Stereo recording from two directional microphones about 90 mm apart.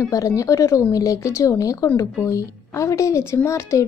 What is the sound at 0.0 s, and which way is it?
A woman's voice, 40° left (ahead or behind).